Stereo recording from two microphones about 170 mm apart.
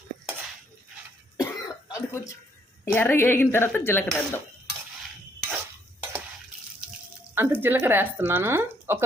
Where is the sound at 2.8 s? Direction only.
15° left (ahead or behind).